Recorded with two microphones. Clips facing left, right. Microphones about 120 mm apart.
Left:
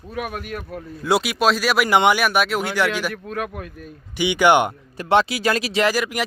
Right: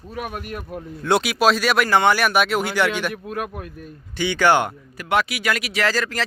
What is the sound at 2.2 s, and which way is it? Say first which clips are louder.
Speech: right 1 dB; centre (ahead or behind).